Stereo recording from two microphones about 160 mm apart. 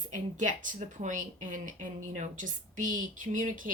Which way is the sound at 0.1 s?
55° right (ahead or behind).